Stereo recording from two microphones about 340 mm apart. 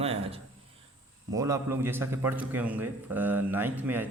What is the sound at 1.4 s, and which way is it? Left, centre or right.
A man's voice, centre.